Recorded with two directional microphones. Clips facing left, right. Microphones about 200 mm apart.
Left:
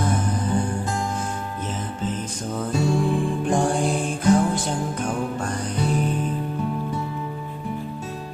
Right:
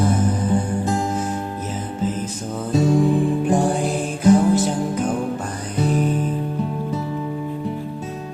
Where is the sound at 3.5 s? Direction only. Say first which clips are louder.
Right 2 dB; 5° right (ahead or behind).